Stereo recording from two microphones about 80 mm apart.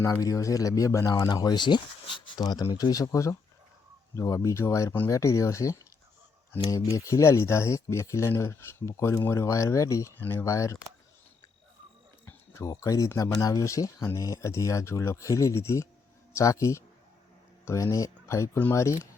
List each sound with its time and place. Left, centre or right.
0.0 s speech: left
1.3 s speech: left
10.2 s speech: left
10.4 s speech: left
12.2 s a sound: left
12.6 s speech: left